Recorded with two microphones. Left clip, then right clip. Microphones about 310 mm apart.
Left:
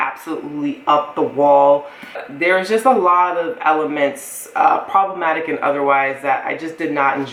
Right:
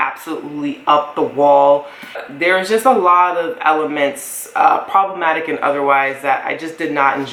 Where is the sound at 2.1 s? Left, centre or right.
Centre.